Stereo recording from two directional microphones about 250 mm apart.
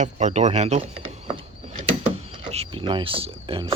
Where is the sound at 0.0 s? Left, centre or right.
Right.